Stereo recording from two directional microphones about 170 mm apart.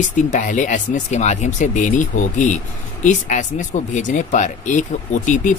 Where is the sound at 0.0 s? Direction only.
50° left (ahead or behind).